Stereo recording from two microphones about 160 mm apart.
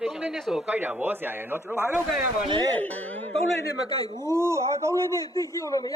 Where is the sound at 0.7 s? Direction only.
10° right (ahead or behind).